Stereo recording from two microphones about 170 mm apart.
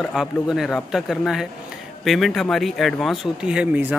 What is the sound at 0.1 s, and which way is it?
Speech, centre (ahead or behind).